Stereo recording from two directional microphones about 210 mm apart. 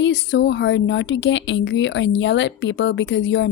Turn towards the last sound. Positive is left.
turn(degrees=60)  # may be behind; listen again after turning